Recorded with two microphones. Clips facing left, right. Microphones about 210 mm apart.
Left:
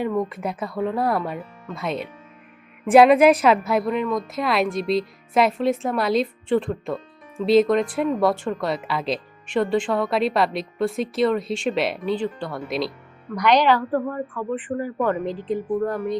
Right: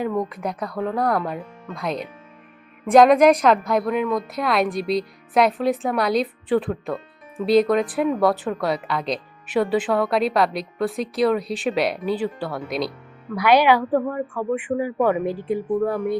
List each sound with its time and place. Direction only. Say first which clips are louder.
0.0 s a woman's voice: even; centre (ahead or behind)